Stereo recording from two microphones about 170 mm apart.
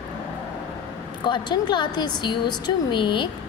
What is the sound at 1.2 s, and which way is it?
A woman's voice, 25° left (ahead or behind).